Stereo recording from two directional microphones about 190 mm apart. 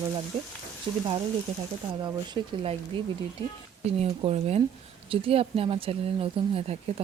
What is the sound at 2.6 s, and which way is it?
Speech, 30° right (ahead or behind).